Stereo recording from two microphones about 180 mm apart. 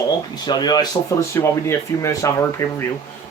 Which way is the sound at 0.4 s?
25° left (ahead or behind).